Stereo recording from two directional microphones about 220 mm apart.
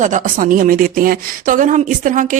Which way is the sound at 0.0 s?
35° right (ahead or behind).